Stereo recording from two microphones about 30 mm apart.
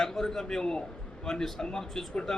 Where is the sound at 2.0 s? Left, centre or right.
Centre.